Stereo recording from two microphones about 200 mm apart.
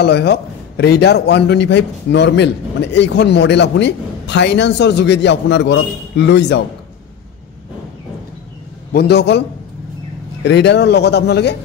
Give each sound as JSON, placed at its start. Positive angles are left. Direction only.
{"t": 0.0, "sound": "a man's voice", "side_deg": 55}
{"t": 8.9, "sound": "a man's voice", "side_deg": 55}
{"t": 10.4, "sound": "a man's voice", "side_deg": 60}